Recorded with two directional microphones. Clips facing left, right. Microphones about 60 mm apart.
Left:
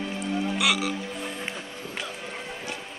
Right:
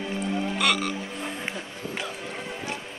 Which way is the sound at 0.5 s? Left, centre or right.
Centre.